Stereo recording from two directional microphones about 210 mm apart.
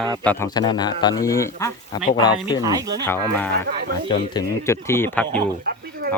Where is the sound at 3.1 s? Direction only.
10° left (ahead or behind).